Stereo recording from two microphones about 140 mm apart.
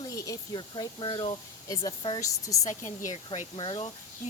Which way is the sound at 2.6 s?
60° left (ahead or behind).